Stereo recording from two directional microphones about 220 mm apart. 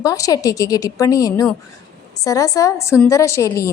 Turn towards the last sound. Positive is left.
turn(degrees=15)  # may be behind; listen again after turning